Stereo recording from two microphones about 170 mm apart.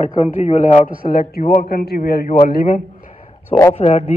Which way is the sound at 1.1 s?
60° left (ahead or behind).